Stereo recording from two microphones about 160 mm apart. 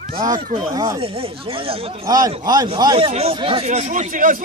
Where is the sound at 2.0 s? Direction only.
25° right (ahead or behind).